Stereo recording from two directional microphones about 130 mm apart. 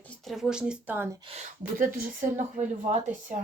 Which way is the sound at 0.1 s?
Centre (ahead or behind).